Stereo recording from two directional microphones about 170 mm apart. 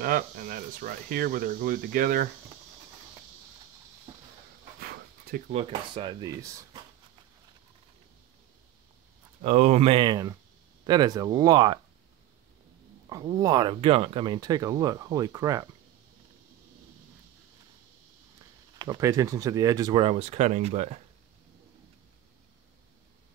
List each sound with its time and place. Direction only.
0.0 s speech: 55° right (ahead or behind)
4.7 s a sound: 65° right (ahead or behind)
5.5 s speech: 35° right (ahead or behind); by 6.8 s 20° right (ahead or behind)
9.4 s speech: 40° right (ahead or behind); by 11.8 s 25° right (ahead or behind)
13.1 s speech: 25° right (ahead or behind)
18.8 s speech: 20° right (ahead or behind); by 21.0 s 40° right (ahead or behind)